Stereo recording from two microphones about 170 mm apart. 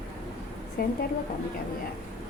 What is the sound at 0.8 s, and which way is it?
Speech, 60° left (ahead or behind).